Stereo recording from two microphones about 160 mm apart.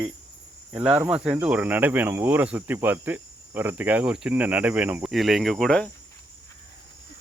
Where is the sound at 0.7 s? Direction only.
10° right (ahead or behind).